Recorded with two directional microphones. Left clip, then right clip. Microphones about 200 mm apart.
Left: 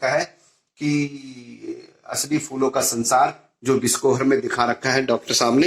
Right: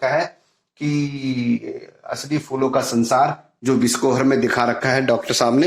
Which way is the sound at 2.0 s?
40° right (ahead or behind).